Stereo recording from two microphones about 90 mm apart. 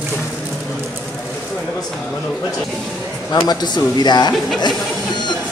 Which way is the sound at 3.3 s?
50° left (ahead or behind).